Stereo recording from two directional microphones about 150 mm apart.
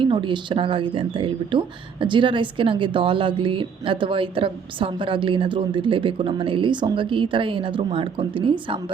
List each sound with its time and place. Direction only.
0.0 s speech: 35° right (ahead or behind)